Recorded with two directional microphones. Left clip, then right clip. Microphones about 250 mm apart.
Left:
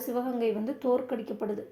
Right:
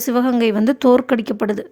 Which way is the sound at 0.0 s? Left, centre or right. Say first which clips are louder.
Right 12 dB; right.